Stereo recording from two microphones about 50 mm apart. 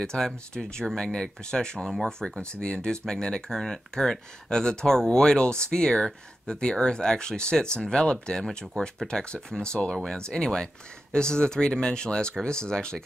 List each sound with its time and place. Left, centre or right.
0.0 s speech: centre
0.5 s speech: centre
0.9 s speech: centre